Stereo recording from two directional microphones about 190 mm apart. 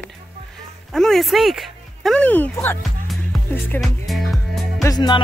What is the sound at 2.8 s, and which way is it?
Music, centre (ahead or behind).